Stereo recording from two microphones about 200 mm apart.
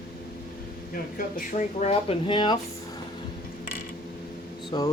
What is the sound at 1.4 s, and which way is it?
Speech, 35° left (ahead or behind).